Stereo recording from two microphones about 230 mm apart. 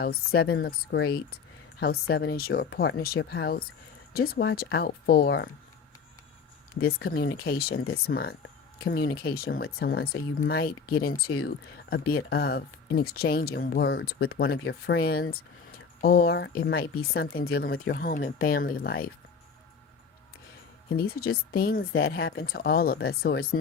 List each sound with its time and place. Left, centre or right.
0.0 s speech: left
6.7 s speech: left
14.6 s speech: left
14.9 s speech: left
21.2 s speech: left